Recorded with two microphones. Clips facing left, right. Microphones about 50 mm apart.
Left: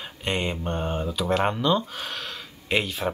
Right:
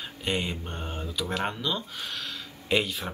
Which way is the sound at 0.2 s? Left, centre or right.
Centre.